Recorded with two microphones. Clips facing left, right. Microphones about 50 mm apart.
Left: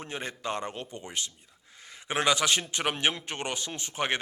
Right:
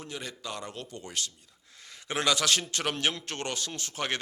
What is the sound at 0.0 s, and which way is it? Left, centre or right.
A man's voice, left.